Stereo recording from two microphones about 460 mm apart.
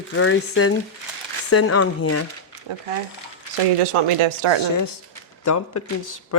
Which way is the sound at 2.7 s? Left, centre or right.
Right.